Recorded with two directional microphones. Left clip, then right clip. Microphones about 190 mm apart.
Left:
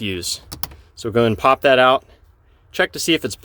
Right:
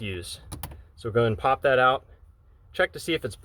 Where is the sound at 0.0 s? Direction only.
40° left (ahead or behind).